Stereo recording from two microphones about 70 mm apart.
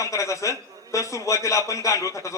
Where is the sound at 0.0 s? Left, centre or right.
Left.